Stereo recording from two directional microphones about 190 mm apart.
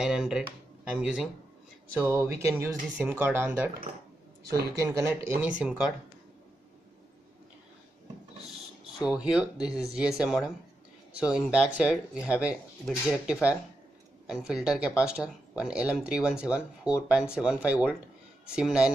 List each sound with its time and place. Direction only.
0.0 s speech: centre (ahead or behind)
2.0 s speech: 15° right (ahead or behind)
4.9 s speech: 15° right (ahead or behind)
9.0 s speech: 5° right (ahead or behind)